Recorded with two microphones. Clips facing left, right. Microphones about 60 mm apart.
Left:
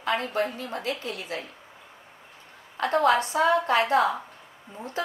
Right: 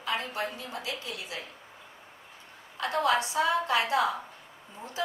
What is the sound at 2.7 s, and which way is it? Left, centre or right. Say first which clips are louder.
A woman's voice: left 5 dB; left.